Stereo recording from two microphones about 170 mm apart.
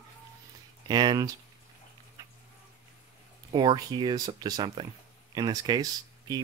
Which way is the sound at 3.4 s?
25° right (ahead or behind).